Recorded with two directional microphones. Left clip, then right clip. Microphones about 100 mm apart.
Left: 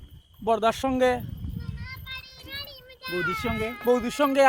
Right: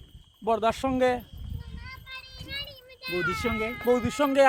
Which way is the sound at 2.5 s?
15° left (ahead or behind).